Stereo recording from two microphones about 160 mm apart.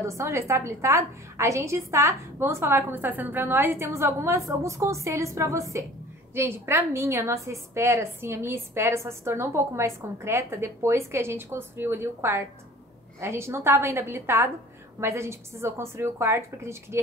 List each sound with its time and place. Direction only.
0.0 s a woman's voice: 20° right (ahead or behind)